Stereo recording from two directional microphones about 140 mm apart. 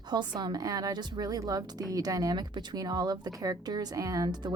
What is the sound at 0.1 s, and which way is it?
A woman's voice, 30° right (ahead or behind).